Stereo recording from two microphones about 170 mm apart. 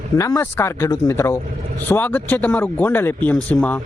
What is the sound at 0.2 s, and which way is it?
A man's voice, 20° left (ahead or behind).